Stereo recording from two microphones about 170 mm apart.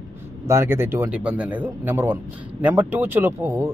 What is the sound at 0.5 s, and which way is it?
A man's voice, 15° right (ahead or behind).